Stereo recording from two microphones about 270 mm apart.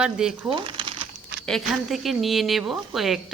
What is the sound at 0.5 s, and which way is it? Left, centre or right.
Crumpling, centre.